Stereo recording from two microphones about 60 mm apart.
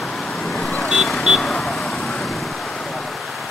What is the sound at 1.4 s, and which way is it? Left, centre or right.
Vehicle, centre.